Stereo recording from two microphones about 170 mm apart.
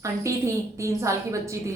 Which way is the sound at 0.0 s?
15° right (ahead or behind).